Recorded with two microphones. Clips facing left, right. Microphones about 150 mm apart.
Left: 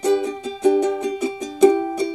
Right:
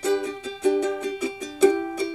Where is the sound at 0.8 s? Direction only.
15° left (ahead or behind).